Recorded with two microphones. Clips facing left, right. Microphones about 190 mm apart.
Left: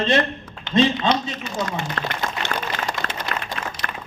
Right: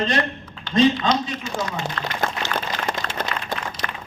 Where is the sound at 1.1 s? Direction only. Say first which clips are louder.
Even; 55° left (ahead or behind).